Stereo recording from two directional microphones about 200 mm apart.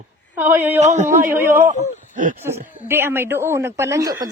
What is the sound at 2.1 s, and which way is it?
Speech, 40° right (ahead or behind).